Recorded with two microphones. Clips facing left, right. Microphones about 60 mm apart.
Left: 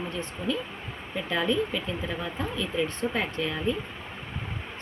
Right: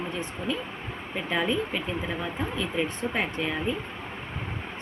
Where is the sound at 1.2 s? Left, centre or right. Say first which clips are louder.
Left 1 dB; right.